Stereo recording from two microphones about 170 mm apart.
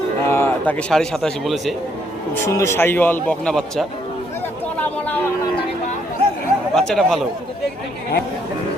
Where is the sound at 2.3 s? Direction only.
15° left (ahead or behind).